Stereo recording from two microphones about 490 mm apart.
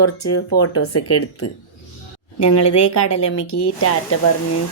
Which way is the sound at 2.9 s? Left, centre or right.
Left.